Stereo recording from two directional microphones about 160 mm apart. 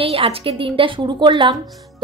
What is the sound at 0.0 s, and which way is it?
A woman's voice, 35° right (ahead or behind).